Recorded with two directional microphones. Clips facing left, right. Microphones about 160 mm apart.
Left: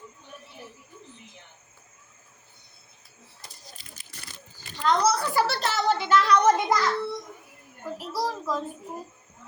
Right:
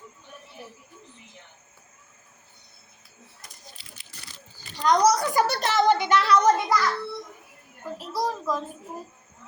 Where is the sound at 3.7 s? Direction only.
45° left (ahead or behind).